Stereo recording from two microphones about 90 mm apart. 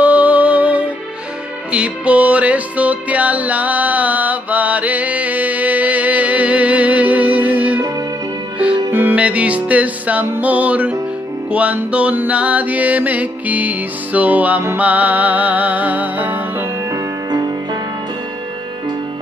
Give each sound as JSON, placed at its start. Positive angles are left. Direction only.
{"t": 0.0, "sound": "music", "side_deg": -15}
{"t": 16.9, "sound": "music", "side_deg": -50}